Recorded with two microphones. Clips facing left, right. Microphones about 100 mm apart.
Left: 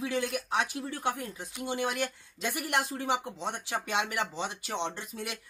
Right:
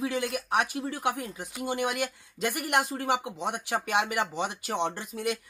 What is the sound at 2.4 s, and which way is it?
Speech, 60° right (ahead or behind).